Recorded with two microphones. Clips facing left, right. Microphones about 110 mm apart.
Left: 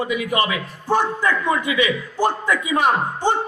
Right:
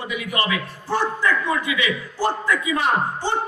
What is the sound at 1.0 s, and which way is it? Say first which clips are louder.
A man's voice: left 1 dB; 20° left (ahead or behind).